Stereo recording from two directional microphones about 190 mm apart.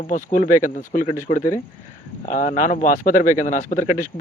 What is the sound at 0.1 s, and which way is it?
A man's voice, 45° left (ahead or behind).